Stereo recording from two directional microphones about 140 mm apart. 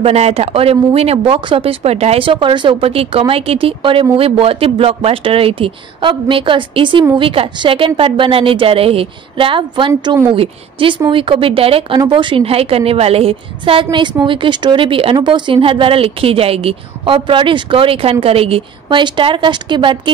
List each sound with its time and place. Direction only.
0.0 s a woman's voice: 50° right (ahead or behind)